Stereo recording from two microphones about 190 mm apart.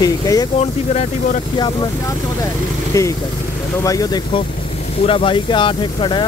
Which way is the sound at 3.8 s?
20° left (ahead or behind).